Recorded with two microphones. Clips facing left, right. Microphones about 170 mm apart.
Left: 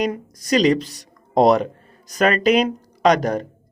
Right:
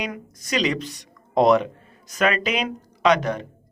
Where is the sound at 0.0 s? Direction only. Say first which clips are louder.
Left 8 dB; 40° left (ahead or behind).